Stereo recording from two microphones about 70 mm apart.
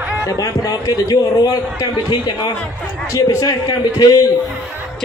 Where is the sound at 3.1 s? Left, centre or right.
Left.